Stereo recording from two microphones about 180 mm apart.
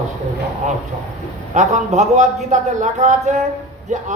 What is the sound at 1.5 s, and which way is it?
A man's voice, 40° right (ahead or behind).